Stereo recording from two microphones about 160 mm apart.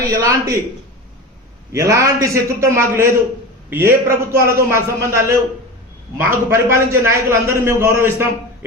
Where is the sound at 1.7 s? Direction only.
20° right (ahead or behind).